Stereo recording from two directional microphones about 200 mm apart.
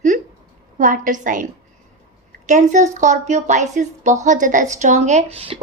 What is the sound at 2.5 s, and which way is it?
A woman's voice, 35° right (ahead or behind).